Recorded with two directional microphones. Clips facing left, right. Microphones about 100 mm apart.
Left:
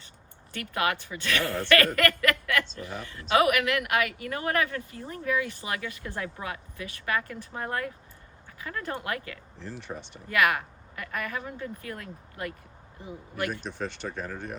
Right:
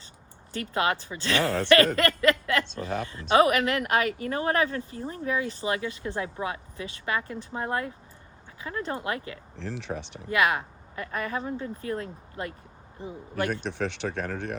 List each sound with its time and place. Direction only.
0.5 s speech: 30° right (ahead or behind)
2.6 s speech: 85° right
3.1 s speech: 25° right (ahead or behind)
9.6 s speech: 90° right
10.2 s speech: 25° right (ahead or behind)
13.5 s speech: 70° right (ahead or behind)